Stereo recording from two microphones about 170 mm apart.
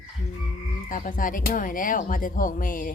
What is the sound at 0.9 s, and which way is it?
Speech, 50° left (ahead or behind).